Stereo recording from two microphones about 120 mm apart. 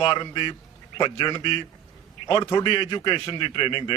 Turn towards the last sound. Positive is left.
turn(degrees=40)  # may be behind; listen again after turning